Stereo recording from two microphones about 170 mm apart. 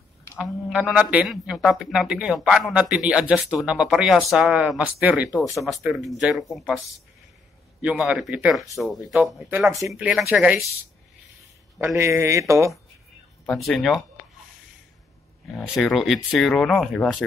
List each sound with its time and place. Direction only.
0.4 s speech: 5° right (ahead or behind)
7.8 s speech: 5° right (ahead or behind)
9.7 s speech: 20° right (ahead or behind)
9.9 s speech: 10° right (ahead or behind)
11.8 s speech: 15° right (ahead or behind)
13.5 s speech: centre (ahead or behind)
15.5 s speech: centre (ahead or behind)